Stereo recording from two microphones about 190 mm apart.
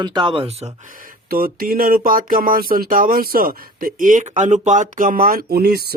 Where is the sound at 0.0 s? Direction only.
25° right (ahead or behind).